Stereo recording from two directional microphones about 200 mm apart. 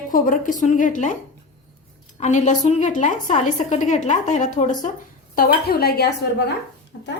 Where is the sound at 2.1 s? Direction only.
35° left (ahead or behind).